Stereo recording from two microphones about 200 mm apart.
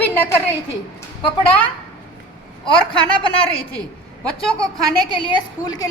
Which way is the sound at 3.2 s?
25° left (ahead or behind).